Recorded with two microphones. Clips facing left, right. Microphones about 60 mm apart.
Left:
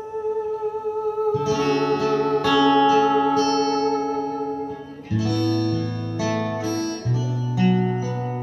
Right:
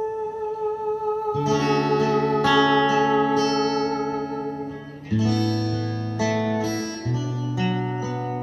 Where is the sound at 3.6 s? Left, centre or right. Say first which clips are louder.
Left 2 dB; centre.